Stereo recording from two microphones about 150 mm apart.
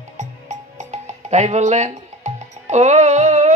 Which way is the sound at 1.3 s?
50° right (ahead or behind).